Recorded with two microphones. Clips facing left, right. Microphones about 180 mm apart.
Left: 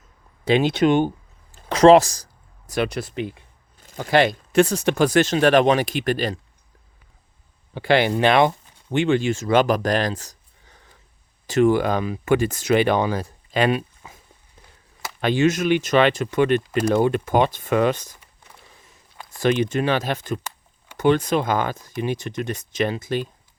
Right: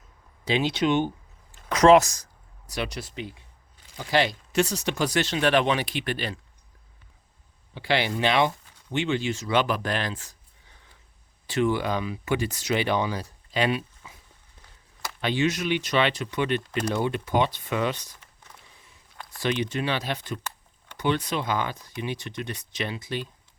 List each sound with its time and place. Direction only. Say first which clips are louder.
0.4 s speech: left 6 dB; 55° left (ahead or behind)
1.5 s a sound: left 4 dB; 30° left (ahead or behind)
2.6 s speech: left 8 dB; 55° left (ahead or behind)
7.7 s speech: left 7 dB; 50° left (ahead or behind)
15.2 s speech: left 6 dB; 45° left (ahead or behind)
18.5 s a sound: left 2 dB; 10° left (ahead or behind)
19.4 s speech: left 7 dB; 45° left (ahead or behind)